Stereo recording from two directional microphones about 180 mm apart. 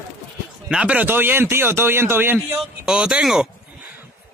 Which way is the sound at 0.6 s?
5° right (ahead or behind).